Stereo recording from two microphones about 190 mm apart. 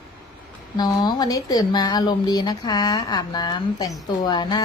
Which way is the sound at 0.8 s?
20° left (ahead or behind).